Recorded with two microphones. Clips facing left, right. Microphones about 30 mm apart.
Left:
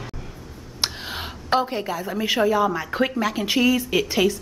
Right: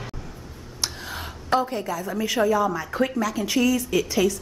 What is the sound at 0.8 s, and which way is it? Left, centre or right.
A woman's voice, left.